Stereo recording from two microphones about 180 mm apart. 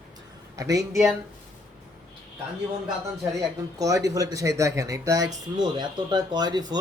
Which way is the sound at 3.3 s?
20° right (ahead or behind).